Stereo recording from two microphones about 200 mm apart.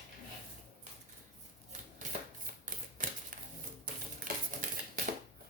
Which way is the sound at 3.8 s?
45° right (ahead or behind).